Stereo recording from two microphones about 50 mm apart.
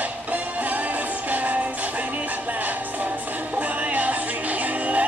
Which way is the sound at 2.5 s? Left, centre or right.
Right.